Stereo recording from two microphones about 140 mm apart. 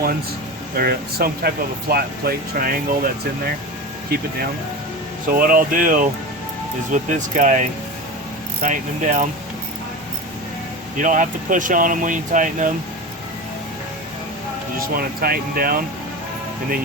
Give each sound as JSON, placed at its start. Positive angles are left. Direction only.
{"t": 0.8, "sound": "speech", "side_deg": -90}
{"t": 5.3, "sound": "speech", "side_deg": -90}
{"t": 6.9, "sound": "speech", "side_deg": -60}
{"t": 10.9, "sound": "speech", "side_deg": -65}
{"t": 14.8, "sound": "speech", "side_deg": -90}